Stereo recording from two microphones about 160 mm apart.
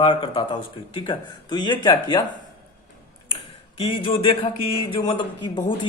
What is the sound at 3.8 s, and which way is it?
A man's voice, 35° left (ahead or behind).